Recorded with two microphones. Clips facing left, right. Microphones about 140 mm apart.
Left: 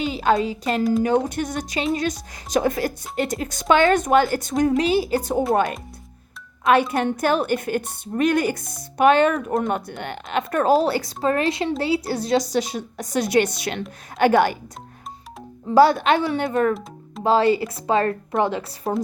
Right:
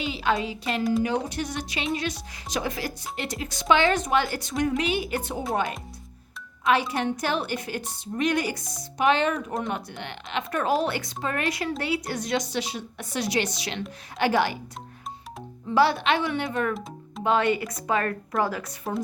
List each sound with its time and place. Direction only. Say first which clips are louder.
0.0 s a sound: left 6 dB; 45° left (ahead or behind)
0.4 s speech: left 5 dB; 45° left (ahead or behind)
4.8 s speech: left 7 dB; 35° left (ahead or behind)
5.5 s speech: left 5 dB; 55° left (ahead or behind)
6.9 s speech: left 6 dB; 50° left (ahead or behind)
15.7 s speech: left 6 dB; 45° left (ahead or behind)
17.2 s a woman's voice: left 5 dB; 30° left (ahead or behind)